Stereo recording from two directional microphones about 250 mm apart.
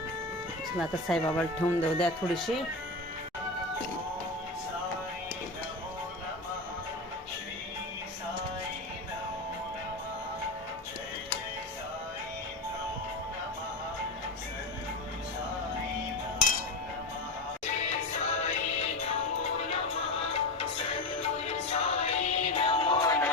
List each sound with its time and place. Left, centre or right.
0.8 s speech: centre
17.8 s music: left